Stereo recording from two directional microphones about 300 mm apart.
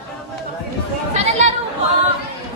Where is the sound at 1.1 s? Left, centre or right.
Right.